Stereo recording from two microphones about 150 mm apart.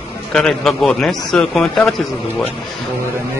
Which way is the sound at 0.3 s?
5° left (ahead or behind).